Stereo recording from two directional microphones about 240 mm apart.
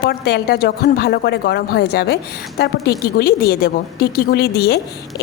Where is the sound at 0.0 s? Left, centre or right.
Left.